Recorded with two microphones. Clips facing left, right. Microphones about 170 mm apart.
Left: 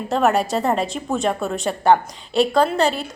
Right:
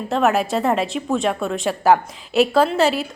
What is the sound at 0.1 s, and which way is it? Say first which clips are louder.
A woman's voice: even; centre (ahead or behind).